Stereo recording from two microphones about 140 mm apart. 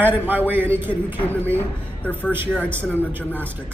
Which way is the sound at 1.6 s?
10° left (ahead or behind).